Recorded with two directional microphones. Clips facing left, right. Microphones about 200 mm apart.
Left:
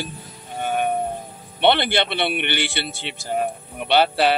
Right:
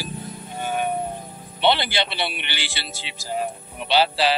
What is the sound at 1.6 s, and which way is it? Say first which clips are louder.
A man's voice: left 3 dB; 55° left (ahead or behind).